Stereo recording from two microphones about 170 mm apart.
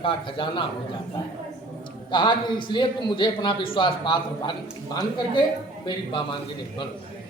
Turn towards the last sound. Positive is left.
turn(degrees=30)  # may be behind; listen again after turning